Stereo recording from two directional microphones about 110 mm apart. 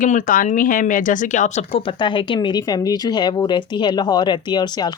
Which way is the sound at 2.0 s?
45° left (ahead or behind).